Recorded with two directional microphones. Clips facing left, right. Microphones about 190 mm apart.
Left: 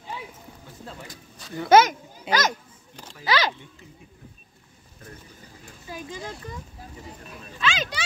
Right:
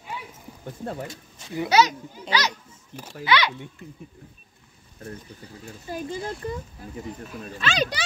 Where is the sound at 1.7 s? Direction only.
50° left (ahead or behind).